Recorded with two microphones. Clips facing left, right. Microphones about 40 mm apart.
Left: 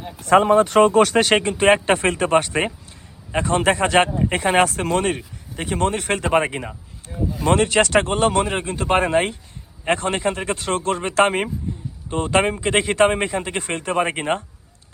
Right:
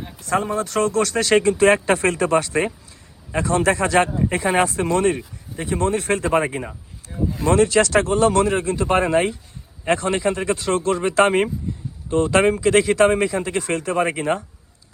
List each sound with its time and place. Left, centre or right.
0.3 s speech: left
0.8 s speech: left
7.5 s speech: left
8.3 s speech: left